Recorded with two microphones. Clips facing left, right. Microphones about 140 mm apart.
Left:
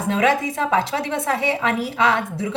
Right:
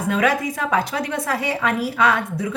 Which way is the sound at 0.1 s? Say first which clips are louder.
Left 1 dB; 25° left (ahead or behind).